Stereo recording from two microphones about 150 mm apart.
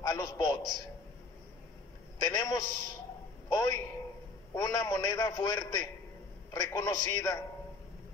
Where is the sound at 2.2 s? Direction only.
25° left (ahead or behind).